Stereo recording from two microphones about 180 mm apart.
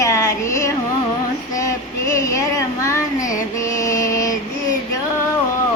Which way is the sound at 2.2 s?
20° left (ahead or behind).